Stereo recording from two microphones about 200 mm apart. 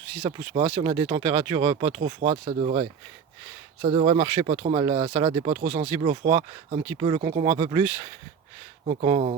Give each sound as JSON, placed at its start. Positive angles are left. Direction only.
{"t": 0.2, "sound": "speech", "side_deg": -30}
{"t": 3.8, "sound": "speech", "side_deg": -25}
{"t": 5.5, "sound": "speech", "side_deg": -35}
{"t": 9.0, "sound": "speech", "side_deg": -30}